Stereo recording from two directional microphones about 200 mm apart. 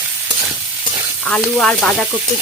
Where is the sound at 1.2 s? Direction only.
5° left (ahead or behind).